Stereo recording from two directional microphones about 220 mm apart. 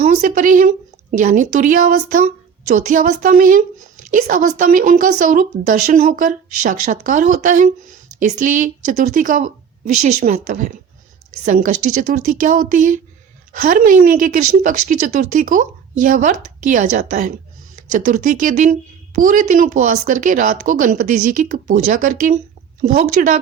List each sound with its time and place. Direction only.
0.0 s speech: 35° right (ahead or behind)
12.1 s speech: 35° right (ahead or behind)